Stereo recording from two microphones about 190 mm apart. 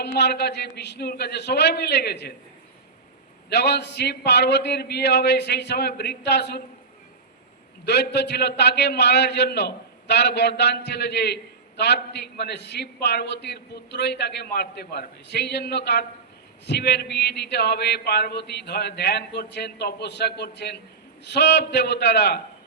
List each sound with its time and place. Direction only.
0.0 s a man's voice: 60° left (ahead or behind)
3.5 s a man's voice: 60° left (ahead or behind)
7.9 s a man's voice: 60° left (ahead or behind)